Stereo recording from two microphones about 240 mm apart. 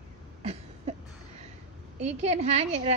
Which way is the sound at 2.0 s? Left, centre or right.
Right.